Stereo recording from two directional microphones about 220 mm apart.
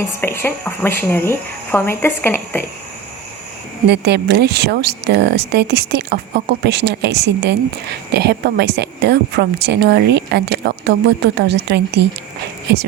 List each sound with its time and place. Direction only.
0.2 s speech: 10° left (ahead or behind)
3.8 s speech: 50° right (ahead or behind)